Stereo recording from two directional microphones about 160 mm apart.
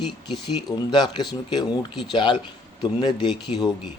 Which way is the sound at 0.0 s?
Centre (ahead or behind).